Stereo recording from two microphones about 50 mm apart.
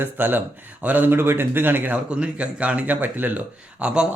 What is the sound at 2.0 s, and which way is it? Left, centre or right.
Speech, right.